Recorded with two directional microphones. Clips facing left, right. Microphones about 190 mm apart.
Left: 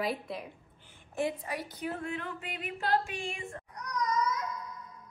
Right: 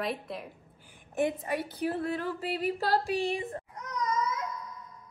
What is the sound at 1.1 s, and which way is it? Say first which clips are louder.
A woman's voice: right 4 dB; 20° right (ahead or behind).